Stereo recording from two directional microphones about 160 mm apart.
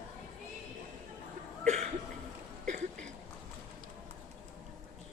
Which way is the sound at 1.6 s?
45° right (ahead or behind).